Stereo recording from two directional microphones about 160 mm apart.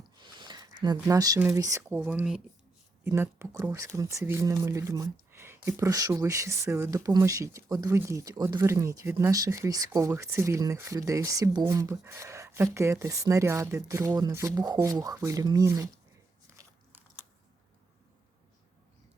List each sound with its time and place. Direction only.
0.2 s a sound: 30° right (ahead or behind)
0.9 s speech: 20° right (ahead or behind)
16.6 s biting: 15° right (ahead or behind)